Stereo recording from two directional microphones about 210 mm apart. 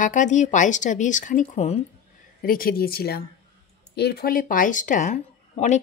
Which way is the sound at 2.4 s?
45° left (ahead or behind).